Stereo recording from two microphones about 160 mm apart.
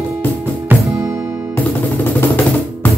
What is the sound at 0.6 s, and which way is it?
Music, 15° right (ahead or behind).